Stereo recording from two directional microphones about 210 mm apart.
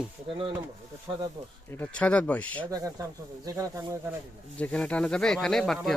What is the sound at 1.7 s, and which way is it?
Speech, 5° left (ahead or behind).